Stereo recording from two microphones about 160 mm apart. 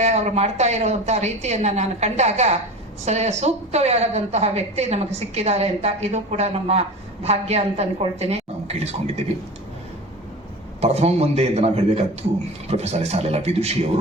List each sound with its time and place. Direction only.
0.0 s a woman's voice: 45° right (ahead or behind)
10.8 s a woman's voice: 40° right (ahead or behind)